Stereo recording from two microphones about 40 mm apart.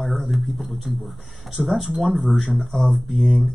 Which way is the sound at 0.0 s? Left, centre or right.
Centre.